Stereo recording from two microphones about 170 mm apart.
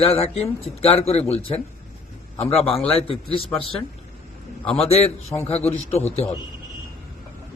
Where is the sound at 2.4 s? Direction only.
35° left (ahead or behind).